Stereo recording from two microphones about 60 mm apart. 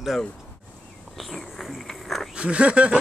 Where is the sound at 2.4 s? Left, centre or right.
Centre.